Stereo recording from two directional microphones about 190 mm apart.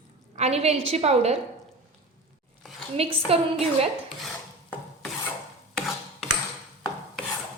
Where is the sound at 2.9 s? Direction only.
30° right (ahead or behind).